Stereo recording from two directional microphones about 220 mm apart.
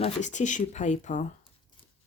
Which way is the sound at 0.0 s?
35° left (ahead or behind).